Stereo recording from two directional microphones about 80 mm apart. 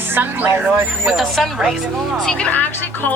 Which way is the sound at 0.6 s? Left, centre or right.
Centre.